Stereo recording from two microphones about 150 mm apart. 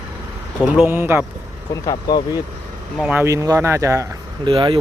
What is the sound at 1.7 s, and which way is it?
Speech, 25° left (ahead or behind).